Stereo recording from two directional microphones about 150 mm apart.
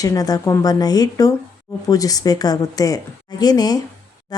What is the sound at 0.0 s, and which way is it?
Speech, 25° left (ahead or behind).